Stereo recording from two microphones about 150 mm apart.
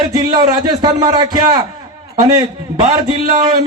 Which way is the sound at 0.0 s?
25° right (ahead or behind).